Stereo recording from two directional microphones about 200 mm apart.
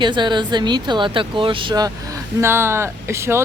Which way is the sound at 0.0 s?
25° right (ahead or behind).